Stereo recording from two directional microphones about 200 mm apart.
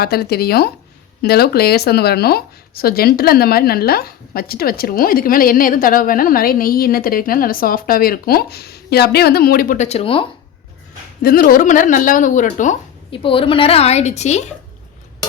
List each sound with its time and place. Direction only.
0.0 s speech: 50° left (ahead or behind); by 10.2 s 30° left (ahead or behind)
11.2 s speech: 45° left (ahead or behind)
13.1 s speech: 25° left (ahead or behind)